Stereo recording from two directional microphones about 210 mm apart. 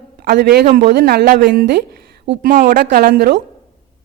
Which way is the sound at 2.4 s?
40° right (ahead or behind).